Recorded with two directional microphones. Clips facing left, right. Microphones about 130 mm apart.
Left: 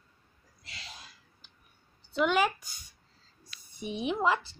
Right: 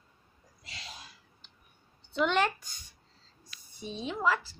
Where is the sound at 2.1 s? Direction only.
5° left (ahead or behind).